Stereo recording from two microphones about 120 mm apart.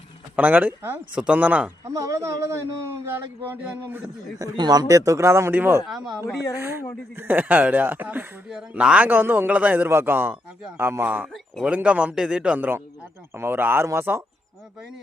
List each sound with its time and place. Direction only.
0.3 s a man's voice: 15° right (ahead or behind)
1.8 s a man's voice: 25° right (ahead or behind)
4.4 s speech: 35° right (ahead or behind)
5.9 s speech: 5° right (ahead or behind)
6.6 s a man's voice: 20° right (ahead or behind)